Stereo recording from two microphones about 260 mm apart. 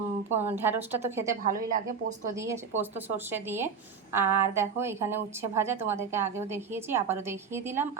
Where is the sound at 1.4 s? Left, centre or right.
Right.